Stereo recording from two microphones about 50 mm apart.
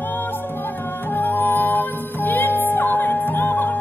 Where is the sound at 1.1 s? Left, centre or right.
Left.